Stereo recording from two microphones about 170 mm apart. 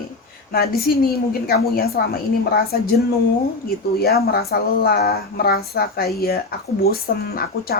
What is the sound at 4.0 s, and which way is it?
Speech, 65° left (ahead or behind).